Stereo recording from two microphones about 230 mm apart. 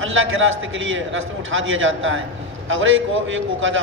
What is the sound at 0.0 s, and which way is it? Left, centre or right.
A man's voice, right.